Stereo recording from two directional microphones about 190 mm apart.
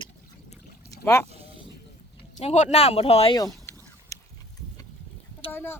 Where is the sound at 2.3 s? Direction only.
35° left (ahead or behind); by 3.7 s 20° left (ahead or behind).